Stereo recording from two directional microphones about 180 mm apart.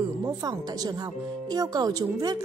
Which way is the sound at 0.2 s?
20° right (ahead or behind).